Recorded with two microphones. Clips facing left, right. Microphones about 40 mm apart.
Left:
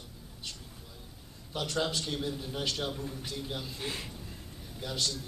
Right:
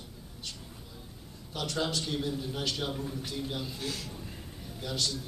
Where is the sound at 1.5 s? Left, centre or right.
Centre.